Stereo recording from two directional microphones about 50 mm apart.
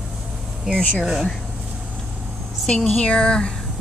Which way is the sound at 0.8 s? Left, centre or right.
Left.